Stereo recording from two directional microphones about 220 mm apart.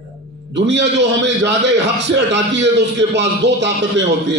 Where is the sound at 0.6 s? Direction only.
55° right (ahead or behind).